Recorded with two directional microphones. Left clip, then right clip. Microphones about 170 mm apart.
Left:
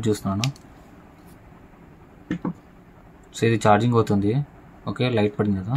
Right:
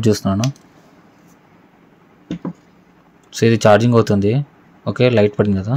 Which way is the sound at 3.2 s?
40° right (ahead or behind).